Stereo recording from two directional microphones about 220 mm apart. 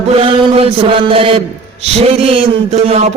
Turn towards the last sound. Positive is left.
turn(degrees=-30)  # may be behind; listen again after turning